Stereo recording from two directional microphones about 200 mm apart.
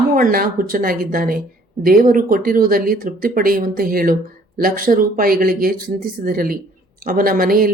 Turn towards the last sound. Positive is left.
turn(degrees=-45)  # may be behind; listen again after turning